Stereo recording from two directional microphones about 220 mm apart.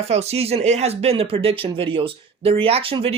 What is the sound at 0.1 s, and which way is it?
Speech, 30° right (ahead or behind).